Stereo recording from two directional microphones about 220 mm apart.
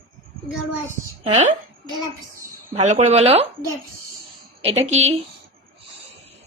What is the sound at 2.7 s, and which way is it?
Speech, 30° right (ahead or behind).